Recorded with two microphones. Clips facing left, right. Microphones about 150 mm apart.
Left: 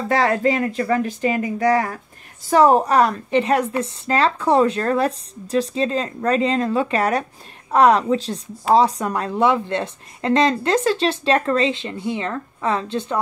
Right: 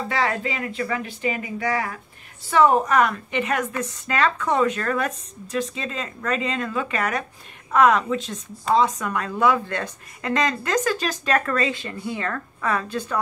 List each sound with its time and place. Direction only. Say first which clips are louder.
0.1 s a woman's voice: left 9 dB; 40° left (ahead or behind); by 13.2 s 25° left (ahead or behind)